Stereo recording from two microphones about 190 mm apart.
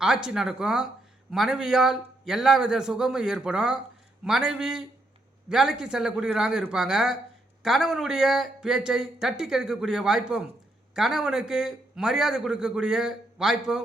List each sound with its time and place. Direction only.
0.0 s a man's voice: 5° right (ahead or behind)